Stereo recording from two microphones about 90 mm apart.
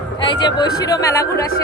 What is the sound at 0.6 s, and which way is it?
Music, 40° left (ahead or behind).